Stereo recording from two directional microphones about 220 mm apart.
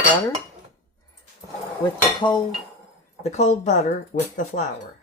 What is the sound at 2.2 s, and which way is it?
Dishes, 20° left (ahead or behind).